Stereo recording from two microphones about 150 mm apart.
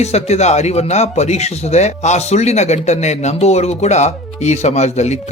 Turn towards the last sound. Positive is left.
turn(degrees=50)  # may be behind; listen again after turning